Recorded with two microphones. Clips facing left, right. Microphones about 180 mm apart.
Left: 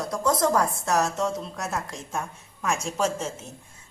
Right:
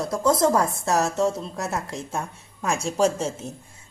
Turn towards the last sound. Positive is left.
turn(degrees=-35)  # may be behind; listen again after turning